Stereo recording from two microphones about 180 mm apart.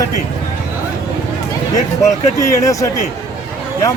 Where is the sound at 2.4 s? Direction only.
20° left (ahead or behind).